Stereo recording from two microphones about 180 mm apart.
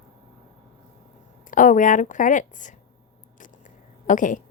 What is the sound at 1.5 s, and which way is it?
A woman's voice, 45° left (ahead or behind).